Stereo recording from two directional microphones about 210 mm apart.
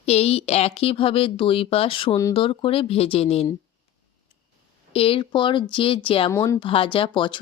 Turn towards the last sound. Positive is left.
turn(degrees=25)  # may be behind; listen again after turning